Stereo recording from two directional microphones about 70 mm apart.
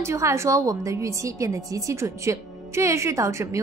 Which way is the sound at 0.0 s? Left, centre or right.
Right.